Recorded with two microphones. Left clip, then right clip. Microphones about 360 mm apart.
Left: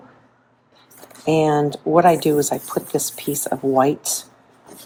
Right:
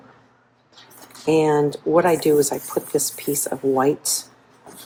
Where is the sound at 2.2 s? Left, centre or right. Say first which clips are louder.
Right 1 dB; left.